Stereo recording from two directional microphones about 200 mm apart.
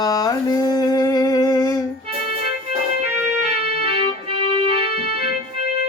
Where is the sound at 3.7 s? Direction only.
30° right (ahead or behind).